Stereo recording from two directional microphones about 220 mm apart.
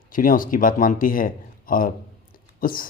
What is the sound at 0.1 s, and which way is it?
A man's voice, 40° left (ahead or behind).